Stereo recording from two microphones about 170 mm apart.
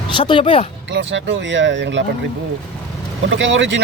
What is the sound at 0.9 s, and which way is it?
Speech, 90° right.